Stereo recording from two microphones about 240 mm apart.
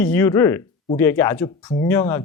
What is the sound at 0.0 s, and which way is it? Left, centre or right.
A man's voice, centre.